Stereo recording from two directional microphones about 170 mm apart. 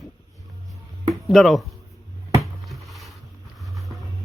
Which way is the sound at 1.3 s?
Centre (ahead or behind).